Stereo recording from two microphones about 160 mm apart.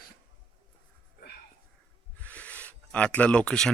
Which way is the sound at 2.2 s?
10° left (ahead or behind).